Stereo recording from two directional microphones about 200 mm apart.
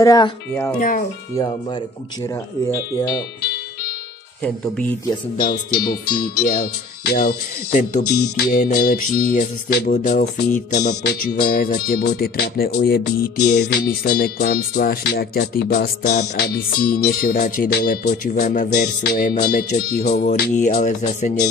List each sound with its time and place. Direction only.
0.0 s speech: 15° left (ahead or behind)
0.7 s speech: 40° left (ahead or behind)
4.4 s speech: 5° left (ahead or behind)
5.4 s speech: 50° left (ahead or behind)
8.0 s speech: 50° left (ahead or behind)
8.6 s speech: 40° left (ahead or behind)
9.9 s speech: 40° left (ahead or behind)
10.7 s speech: 55° left (ahead or behind)
18.7 s speech: 55° left (ahead or behind); by 21.3 s 35° left (ahead or behind)